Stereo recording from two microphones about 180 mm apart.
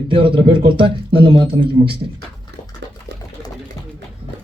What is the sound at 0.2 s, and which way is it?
Speech, 30° right (ahead or behind).